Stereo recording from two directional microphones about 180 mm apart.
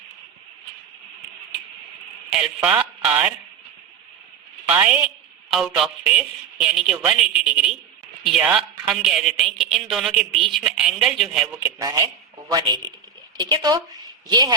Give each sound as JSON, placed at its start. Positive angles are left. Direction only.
{"t": 2.6, "sound": "speech", "side_deg": -5}
{"t": 4.7, "sound": "a woman's voice", "side_deg": -5}
{"t": 11.6, "sound": "speech", "side_deg": -20}